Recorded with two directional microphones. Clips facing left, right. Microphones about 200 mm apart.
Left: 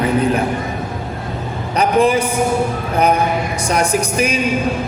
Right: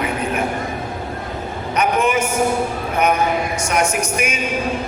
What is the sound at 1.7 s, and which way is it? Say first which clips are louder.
Speech: left 4 dB; 35° left (ahead or behind).